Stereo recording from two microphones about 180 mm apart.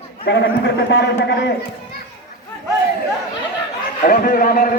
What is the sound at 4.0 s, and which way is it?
Speech, 50° left (ahead or behind).